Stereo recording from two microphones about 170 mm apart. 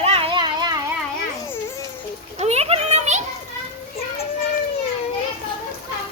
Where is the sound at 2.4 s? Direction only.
40° right (ahead or behind).